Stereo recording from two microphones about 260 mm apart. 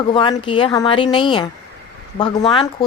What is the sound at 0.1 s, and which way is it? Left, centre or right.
Speech, centre.